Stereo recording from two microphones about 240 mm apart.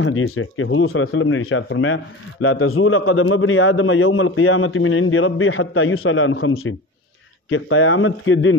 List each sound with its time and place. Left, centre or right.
0.0 s a man's voice: left